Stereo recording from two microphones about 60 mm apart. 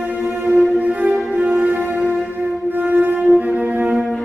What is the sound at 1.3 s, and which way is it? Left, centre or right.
Music, centre.